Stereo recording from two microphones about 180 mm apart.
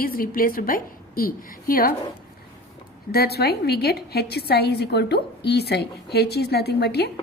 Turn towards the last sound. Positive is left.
turn(degrees=65)  # may be behind; listen again after turning